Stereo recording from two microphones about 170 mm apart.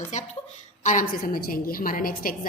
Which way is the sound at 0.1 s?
45° left (ahead or behind).